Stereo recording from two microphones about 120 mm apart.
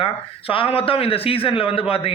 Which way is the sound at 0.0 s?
50° left (ahead or behind).